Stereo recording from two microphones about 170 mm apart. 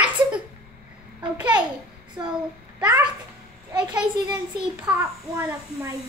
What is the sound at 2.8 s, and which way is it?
Speech, 10° right (ahead or behind).